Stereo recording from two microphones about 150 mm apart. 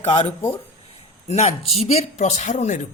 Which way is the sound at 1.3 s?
45° left (ahead or behind).